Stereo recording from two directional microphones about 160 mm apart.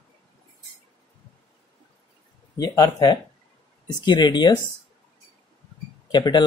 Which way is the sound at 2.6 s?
25° left (ahead or behind).